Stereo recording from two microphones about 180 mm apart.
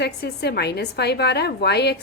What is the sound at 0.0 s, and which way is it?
A woman's voice, 65° left (ahead or behind).